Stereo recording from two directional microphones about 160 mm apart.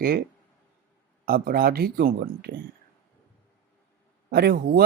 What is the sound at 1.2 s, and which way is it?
Speech, 65° right (ahead or behind).